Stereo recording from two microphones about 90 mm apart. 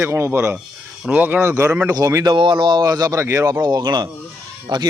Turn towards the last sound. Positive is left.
turn(degrees=-55)  # may be behind; listen again after turning